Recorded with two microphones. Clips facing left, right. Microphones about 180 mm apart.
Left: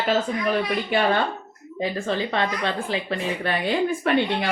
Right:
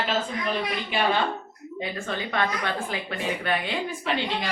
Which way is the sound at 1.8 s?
35° left (ahead or behind).